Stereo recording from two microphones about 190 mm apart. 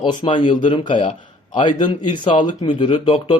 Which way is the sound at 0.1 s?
25° left (ahead or behind).